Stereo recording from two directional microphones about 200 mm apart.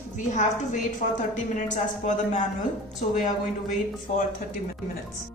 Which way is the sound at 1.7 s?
40° left (ahead or behind).